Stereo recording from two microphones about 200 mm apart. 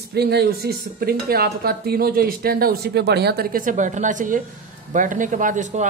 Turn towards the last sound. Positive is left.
turn(degrees=-40)  # may be behind; listen again after turning